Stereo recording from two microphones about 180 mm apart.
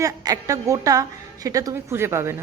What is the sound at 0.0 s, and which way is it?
A woman's voice, 20° right (ahead or behind).